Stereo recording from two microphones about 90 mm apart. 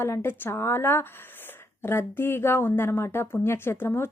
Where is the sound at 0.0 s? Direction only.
30° left (ahead or behind).